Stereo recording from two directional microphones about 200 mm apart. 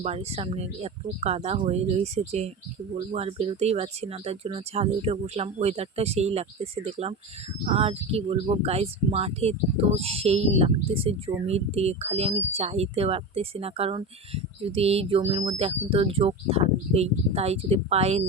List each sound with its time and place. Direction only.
0.0 s speech: 30° right (ahead or behind)